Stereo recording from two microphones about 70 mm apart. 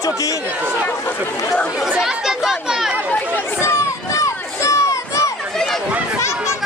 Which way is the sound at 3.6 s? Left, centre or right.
Left.